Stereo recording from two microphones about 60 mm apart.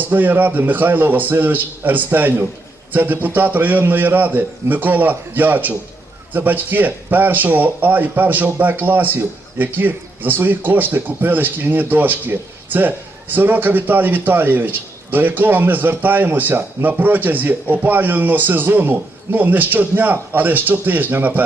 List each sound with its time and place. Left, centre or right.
0.0 s speech: right